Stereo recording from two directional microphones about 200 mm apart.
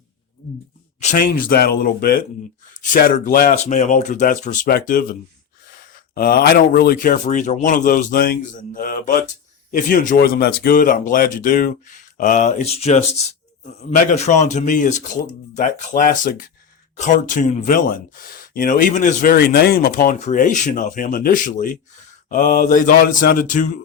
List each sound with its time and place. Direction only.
1.0 s speech: 45° left (ahead or behind)
6.1 s speech: 50° left (ahead or behind)